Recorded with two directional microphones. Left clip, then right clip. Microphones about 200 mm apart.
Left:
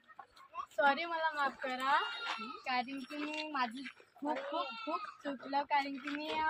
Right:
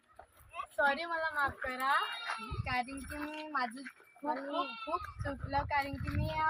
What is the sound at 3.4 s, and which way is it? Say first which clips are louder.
Speech: right 2 dB; 15° right (ahead or behind).